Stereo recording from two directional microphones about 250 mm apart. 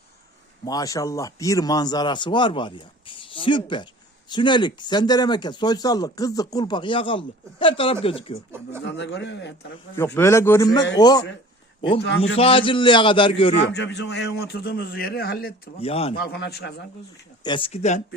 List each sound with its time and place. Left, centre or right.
0.6 s a man's voice: centre
8.8 s speech: left
10.2 s speech: centre
11.9 s speech: left
12.4 s a man's voice: left
13.6 s a man's voice: left
15.8 s a man's voice: left
16.1 s a man's voice: left
17.4 s a man's voice: centre